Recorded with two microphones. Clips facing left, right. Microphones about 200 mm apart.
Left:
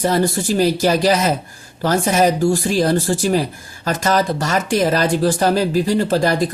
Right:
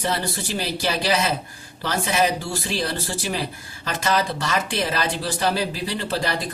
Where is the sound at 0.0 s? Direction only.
45° left (ahead or behind).